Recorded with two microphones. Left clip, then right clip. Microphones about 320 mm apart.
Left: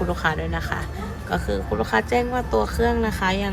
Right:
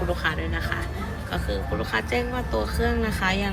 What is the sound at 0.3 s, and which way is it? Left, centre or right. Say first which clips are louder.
Speech: left 3 dB; centre.